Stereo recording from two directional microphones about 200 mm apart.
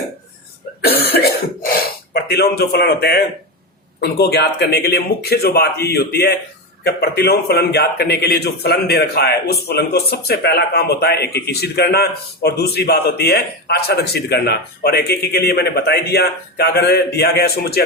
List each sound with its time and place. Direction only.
0.8 s a man's voice: 50° left (ahead or behind)